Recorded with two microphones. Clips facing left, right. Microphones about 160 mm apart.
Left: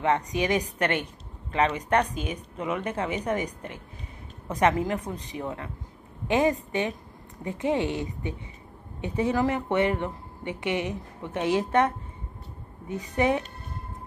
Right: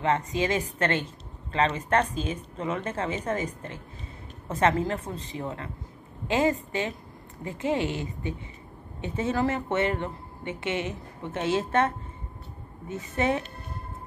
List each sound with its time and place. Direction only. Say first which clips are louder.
0.0 s a woman's voice: left 1 dB; 15° left (ahead or behind)